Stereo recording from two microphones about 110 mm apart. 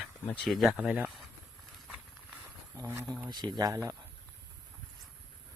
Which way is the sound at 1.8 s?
5° right (ahead or behind).